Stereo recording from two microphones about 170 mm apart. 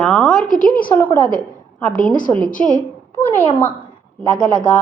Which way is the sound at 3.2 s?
10° left (ahead or behind).